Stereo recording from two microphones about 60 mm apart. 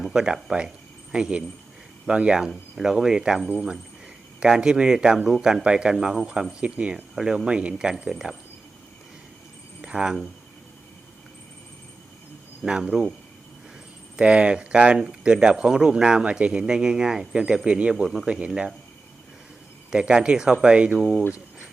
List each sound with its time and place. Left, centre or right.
0.0 s speech: centre
9.8 s speech: centre
12.6 s speech: centre
14.2 s speech: centre
18.3 s speech: centre
19.9 s speech: centre